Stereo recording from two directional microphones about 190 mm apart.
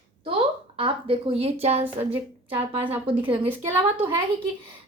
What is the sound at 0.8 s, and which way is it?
A woman's voice, 30° right (ahead or behind).